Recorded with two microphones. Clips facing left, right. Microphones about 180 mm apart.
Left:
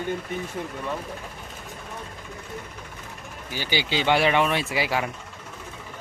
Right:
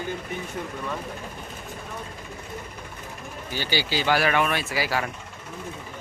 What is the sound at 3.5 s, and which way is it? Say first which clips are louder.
Speech: even; 15° left (ahead or behind).